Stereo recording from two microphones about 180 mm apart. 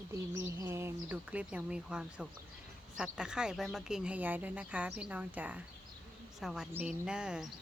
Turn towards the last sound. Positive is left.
turn(degrees=-5)  # may be behind; listen again after turning